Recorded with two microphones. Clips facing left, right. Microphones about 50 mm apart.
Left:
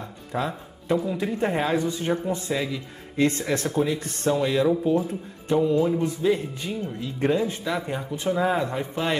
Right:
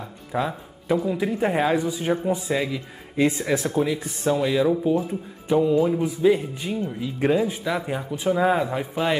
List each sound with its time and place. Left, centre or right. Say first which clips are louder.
0.0 s speech: right 2 dB; centre